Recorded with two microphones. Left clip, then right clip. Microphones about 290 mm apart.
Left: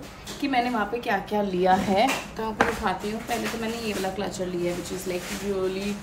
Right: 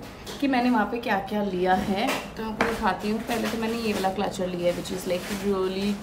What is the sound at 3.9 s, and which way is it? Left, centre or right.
Speech, centre.